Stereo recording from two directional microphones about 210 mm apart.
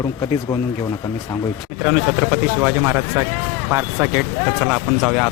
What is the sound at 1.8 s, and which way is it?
Speech, 5° right (ahead or behind).